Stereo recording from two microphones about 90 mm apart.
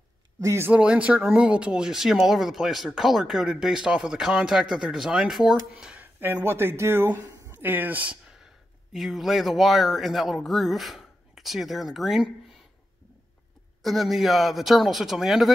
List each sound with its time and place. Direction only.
0.4 s speech: 35° right (ahead or behind)
0.7 s speech: 15° right (ahead or behind)
6.1 s speech: 25° right (ahead or behind)
8.9 s speech: centre (ahead or behind)
13.8 s speech: centre (ahead or behind)